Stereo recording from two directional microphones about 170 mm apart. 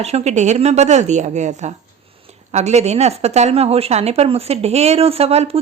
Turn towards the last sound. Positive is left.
turn(degrees=-35)  # may be behind; listen again after turning